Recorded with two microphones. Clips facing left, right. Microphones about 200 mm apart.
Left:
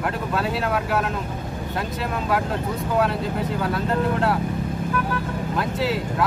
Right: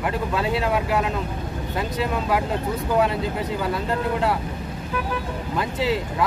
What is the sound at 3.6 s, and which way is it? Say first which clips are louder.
Speech: left 2 dB; centre (ahead or behind).